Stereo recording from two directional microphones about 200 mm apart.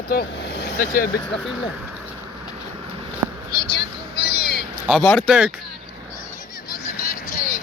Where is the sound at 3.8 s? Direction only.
50° left (ahead or behind).